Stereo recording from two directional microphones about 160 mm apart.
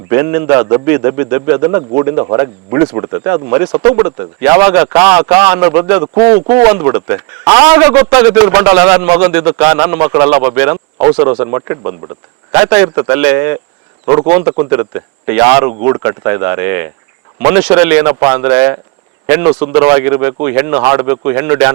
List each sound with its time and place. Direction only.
0.1 s a man's voice: 15° right (ahead or behind)
14.0 s speech: 25° right (ahead or behind)
14.3 s a man's voice: 10° right (ahead or behind)